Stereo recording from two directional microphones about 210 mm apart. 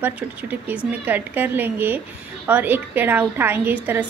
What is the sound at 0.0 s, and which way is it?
A woman's voice, 10° right (ahead or behind).